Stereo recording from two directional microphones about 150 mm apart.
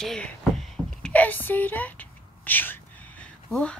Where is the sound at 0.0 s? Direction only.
5° left (ahead or behind).